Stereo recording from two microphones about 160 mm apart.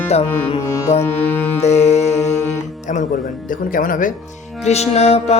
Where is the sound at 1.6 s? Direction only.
45° left (ahead or behind).